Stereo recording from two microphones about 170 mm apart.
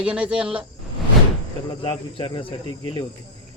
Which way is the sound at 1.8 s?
30° left (ahead or behind).